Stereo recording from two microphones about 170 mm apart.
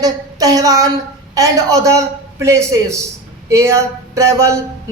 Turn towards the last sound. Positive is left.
turn(degrees=-15)  # may be behind; listen again after turning